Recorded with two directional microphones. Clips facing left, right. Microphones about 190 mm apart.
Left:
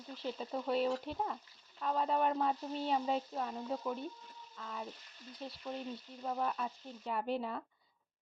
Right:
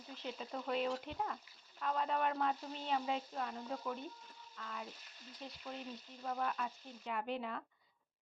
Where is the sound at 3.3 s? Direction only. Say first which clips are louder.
Left 4 dB; 20° left (ahead or behind).